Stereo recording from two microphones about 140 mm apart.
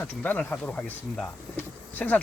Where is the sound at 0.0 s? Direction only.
10° left (ahead or behind).